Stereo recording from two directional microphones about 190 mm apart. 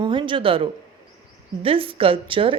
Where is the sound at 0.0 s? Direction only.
25° right (ahead or behind).